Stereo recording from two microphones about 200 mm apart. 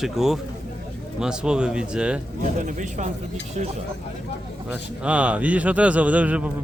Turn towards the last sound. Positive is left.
turn(degrees=-5)  # may be behind; listen again after turning